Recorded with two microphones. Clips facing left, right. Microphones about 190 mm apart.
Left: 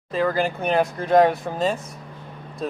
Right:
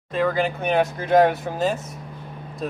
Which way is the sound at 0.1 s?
Centre (ahead or behind).